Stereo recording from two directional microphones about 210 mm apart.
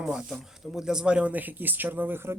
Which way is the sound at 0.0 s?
Centre (ahead or behind).